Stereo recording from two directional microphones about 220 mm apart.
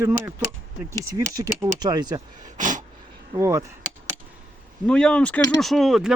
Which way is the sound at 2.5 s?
35° right (ahead or behind).